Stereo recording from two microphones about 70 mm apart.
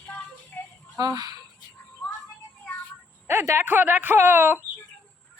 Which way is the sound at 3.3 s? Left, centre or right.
Right.